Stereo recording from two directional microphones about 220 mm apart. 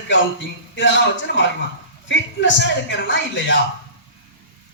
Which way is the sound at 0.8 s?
55° left (ahead or behind).